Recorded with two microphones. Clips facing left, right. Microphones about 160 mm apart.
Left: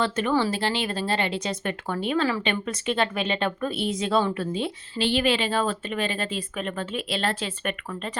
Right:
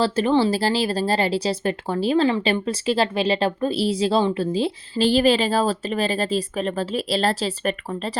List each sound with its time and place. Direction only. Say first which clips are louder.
0.0 s a woman's voice: right 5 dB; 35° right (ahead or behind)